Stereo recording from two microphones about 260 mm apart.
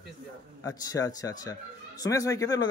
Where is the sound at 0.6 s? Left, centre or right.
Centre.